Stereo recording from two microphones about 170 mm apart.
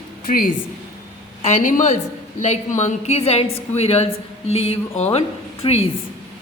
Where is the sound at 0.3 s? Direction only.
55° left (ahead or behind).